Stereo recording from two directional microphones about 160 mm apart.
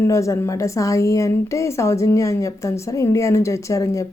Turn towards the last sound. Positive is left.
turn(degrees=20)  # may be behind; listen again after turning